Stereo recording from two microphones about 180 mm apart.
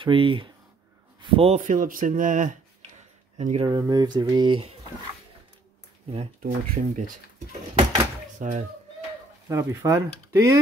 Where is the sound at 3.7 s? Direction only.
20° right (ahead or behind).